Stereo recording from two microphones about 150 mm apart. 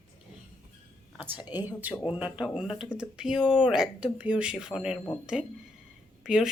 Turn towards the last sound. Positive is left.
turn(degrees=-5)  # may be behind; listen again after turning